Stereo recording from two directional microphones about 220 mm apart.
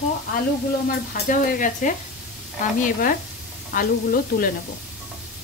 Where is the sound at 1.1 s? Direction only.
40° left (ahead or behind).